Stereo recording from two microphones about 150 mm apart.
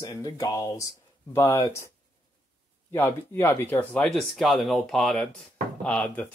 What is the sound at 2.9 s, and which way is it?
Speech, 15° left (ahead or behind).